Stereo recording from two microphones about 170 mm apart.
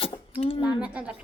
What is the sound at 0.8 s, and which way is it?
Speech, 5° right (ahead or behind).